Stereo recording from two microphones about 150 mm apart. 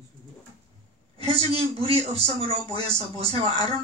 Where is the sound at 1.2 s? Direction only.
40° right (ahead or behind).